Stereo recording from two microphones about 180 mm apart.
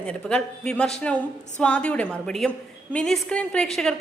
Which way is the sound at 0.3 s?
5° left (ahead or behind).